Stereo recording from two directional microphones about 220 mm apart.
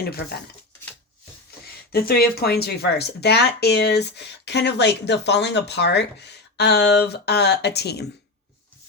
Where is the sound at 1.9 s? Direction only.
45° left (ahead or behind).